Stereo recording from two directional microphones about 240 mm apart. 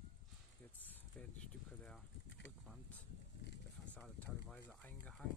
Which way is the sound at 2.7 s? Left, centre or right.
Centre.